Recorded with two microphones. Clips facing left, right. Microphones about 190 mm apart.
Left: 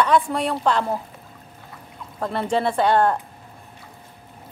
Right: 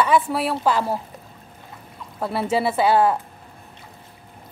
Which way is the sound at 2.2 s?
5° right (ahead or behind).